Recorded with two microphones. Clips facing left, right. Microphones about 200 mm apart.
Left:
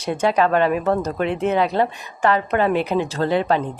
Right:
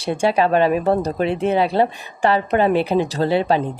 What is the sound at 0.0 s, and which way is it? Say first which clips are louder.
Speech: right 1 dB; 30° right (ahead or behind).